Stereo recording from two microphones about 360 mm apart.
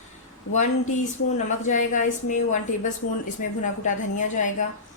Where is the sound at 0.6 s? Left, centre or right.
Centre.